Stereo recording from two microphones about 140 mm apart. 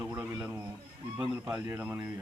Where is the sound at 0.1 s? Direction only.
15° right (ahead or behind).